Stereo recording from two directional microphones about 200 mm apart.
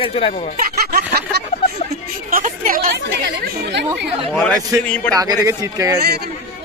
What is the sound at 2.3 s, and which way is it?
Speech, 45° right (ahead or behind).